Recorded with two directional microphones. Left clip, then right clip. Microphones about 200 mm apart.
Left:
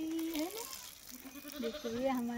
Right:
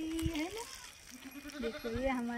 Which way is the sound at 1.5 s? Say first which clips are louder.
Even; 35° left (ahead or behind).